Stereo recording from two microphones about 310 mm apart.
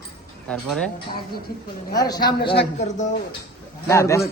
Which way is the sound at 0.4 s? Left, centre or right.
Centre.